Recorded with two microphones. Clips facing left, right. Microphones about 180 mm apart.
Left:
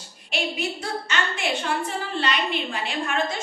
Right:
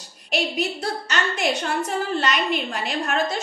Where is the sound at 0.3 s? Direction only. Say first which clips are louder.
Right 3 dB; 40° right (ahead or behind).